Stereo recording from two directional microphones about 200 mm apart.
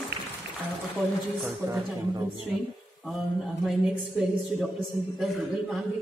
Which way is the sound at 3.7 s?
Centre (ahead or behind).